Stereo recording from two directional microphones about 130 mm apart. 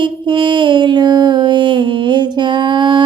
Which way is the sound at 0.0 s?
40° right (ahead or behind).